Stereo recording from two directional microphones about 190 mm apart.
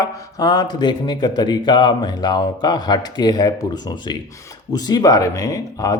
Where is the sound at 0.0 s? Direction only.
20° left (ahead or behind).